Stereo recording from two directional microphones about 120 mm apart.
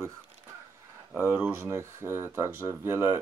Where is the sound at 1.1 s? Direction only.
15° right (ahead or behind).